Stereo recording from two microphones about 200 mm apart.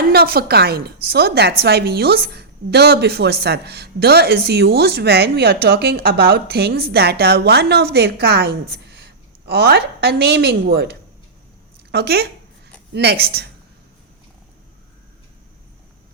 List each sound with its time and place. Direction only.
0.1 s a woman's voice: 50° right (ahead or behind)